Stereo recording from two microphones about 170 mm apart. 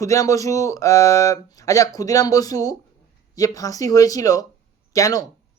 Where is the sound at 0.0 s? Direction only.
20° left (ahead or behind).